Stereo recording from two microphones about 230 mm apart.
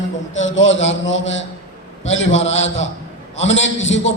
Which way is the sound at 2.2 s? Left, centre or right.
Left.